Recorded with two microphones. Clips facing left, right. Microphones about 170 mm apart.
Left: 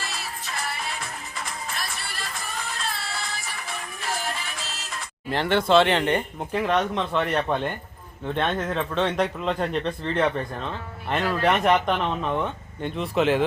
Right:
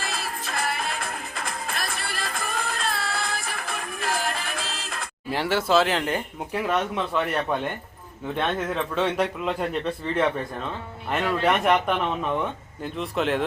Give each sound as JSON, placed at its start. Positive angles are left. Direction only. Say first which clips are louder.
{"t": 0.0, "sound": "music", "louder": "right 3 dB", "side_deg": -55}
{"t": 5.3, "sound": "a man's voice", "louder": "left 2 dB", "side_deg": -5}